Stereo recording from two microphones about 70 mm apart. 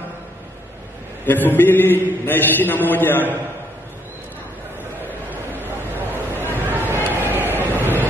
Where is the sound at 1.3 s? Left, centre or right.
Left.